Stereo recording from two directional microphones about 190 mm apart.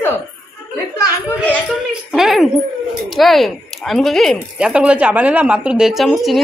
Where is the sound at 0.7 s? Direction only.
15° left (ahead or behind).